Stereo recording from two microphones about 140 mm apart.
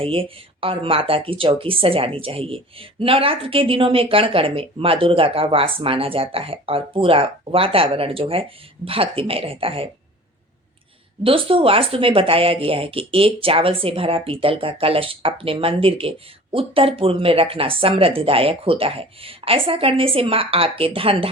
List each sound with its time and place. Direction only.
0.0 s speech: 40° right (ahead or behind)
11.2 s speech: 40° right (ahead or behind)